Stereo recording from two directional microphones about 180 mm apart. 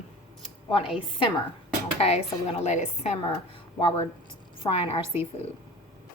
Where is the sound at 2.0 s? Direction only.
35° left (ahead or behind).